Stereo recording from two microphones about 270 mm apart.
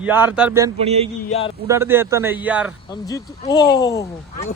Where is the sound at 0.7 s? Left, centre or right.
Right.